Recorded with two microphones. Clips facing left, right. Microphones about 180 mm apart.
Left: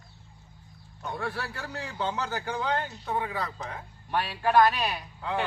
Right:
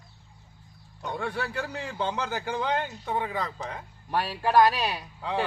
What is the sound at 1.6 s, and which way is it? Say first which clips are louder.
A man's voice: right 1 dB; 15° right (ahead or behind).